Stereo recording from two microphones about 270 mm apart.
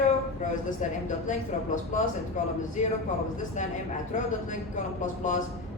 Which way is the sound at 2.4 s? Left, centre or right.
Left.